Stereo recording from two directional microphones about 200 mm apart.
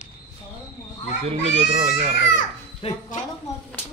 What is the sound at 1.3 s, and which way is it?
Speech, 35° right (ahead or behind).